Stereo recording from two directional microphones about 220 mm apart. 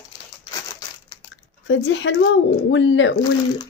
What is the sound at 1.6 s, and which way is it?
Speech, 55° left (ahead or behind).